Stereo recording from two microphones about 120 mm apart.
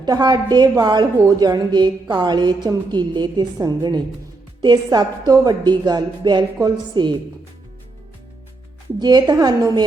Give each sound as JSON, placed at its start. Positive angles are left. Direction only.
{"t": 0.0, "sound": "a woman's voice", "side_deg": -35}
{"t": 9.0, "sound": "a woman's voice", "side_deg": -35}